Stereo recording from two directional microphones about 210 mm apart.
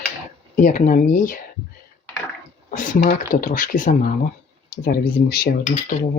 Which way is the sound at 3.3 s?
40° left (ahead or behind).